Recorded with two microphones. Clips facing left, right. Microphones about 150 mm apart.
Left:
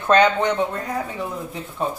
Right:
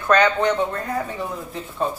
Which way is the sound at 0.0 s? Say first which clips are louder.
Left 1 dB; 20° left (ahead or behind).